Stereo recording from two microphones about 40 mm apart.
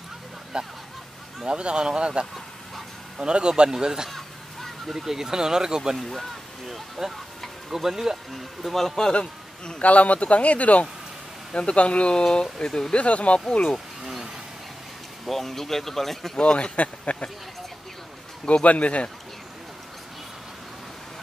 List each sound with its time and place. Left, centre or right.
0.5 s speech: centre
4.1 s honk: centre
4.8 s speech: centre
5.9 s speech: centre
7.7 s speech: centre
8.3 s speech: centre; by 9.8 s left
9.8 s speech: left
12.9 s speech: left
15.2 s speech: centre
16.5 s speech: left
18.4 s speech: left